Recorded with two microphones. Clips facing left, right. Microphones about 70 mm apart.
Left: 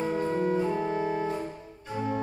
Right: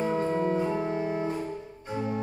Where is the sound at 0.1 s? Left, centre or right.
Right.